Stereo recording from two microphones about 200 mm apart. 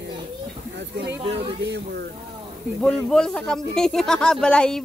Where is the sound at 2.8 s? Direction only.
Centre (ahead or behind).